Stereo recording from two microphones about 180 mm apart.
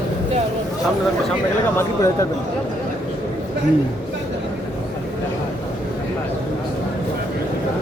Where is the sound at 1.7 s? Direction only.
15° left (ahead or behind).